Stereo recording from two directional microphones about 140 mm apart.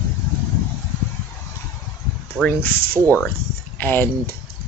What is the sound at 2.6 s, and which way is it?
Speech, 90° right.